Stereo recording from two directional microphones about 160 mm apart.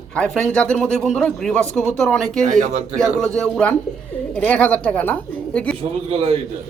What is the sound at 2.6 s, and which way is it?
Speech, 50° right (ahead or behind).